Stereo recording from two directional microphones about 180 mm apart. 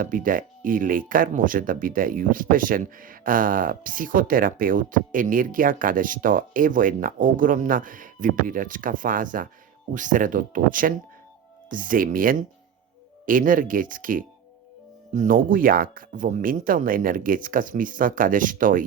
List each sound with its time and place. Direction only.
0.0 s speech: 50° right (ahead or behind)